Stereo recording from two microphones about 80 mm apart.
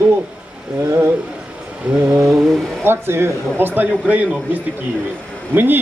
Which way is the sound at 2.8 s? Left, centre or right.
Right.